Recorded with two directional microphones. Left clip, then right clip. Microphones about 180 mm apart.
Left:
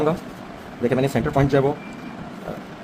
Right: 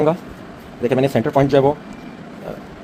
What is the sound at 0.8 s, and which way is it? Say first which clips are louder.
Speech: right 4 dB; 30° right (ahead or behind).